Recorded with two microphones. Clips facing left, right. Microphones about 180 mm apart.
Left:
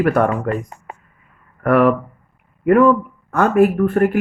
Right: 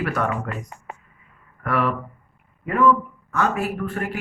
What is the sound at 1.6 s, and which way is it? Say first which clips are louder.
Speech: left 10 dB; 55° left (ahead or behind).